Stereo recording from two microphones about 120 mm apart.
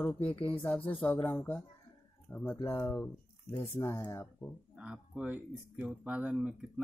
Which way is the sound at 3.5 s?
50° left (ahead or behind).